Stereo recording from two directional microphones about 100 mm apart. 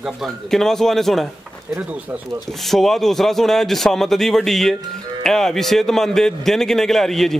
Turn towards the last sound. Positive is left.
turn(degrees=5)  # may be behind; listen again after turning